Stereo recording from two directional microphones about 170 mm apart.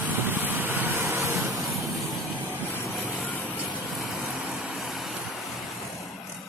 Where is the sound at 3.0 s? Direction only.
10° left (ahead or behind).